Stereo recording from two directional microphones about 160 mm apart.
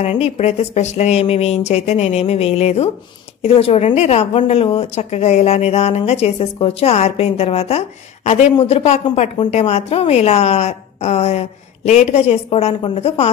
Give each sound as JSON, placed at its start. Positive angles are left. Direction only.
{"t": 0.0, "sound": "a woman's voice", "side_deg": 40}